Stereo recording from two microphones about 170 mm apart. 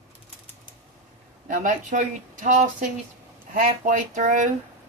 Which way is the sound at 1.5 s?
50° right (ahead or behind).